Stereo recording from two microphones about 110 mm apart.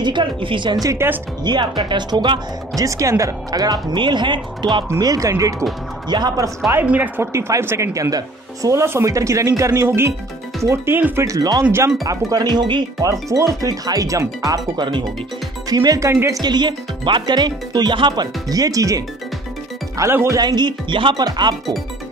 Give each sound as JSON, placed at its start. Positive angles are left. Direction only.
{"t": 0.0, "sound": "speech", "side_deg": -45}
{"t": 0.8, "sound": "speech", "side_deg": -20}
{"t": 1.4, "sound": "speech", "side_deg": -45}
{"t": 4.8, "sound": "speech", "side_deg": -30}
{"t": 6.7, "sound": "speech", "side_deg": -15}
{"t": 7.3, "sound": "speech", "side_deg": -25}
{"t": 11.2, "sound": "speech", "side_deg": -30}
{"t": 13.1, "sound": "speech", "side_deg": -30}
{"t": 14.8, "sound": "speech", "side_deg": -45}
{"t": 16.4, "sound": "speech", "side_deg": -45}
{"t": 20.3, "sound": "speech", "side_deg": -40}